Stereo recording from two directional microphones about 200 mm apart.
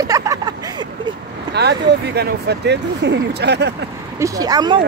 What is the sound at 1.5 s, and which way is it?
Speech, 55° right (ahead or behind).